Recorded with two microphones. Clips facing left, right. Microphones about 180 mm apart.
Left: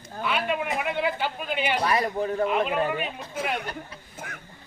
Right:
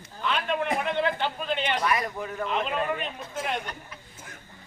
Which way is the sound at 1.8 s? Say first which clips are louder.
Left 3 dB; 35° left (ahead or behind).